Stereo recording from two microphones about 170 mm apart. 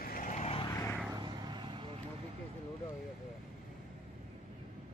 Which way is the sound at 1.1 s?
25° right (ahead or behind).